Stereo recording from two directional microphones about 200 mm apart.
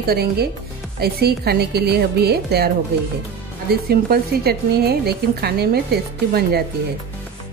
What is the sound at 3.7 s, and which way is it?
A woman's voice, 50° right (ahead or behind).